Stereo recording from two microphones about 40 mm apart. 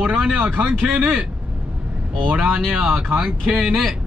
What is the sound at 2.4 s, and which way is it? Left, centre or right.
Speech, right.